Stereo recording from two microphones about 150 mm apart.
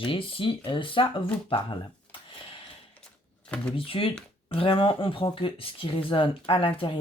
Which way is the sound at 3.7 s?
35° left (ahead or behind).